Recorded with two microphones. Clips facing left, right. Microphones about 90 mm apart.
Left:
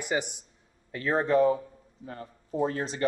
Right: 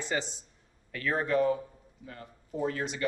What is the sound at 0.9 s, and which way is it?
Speech, 30° left (ahead or behind).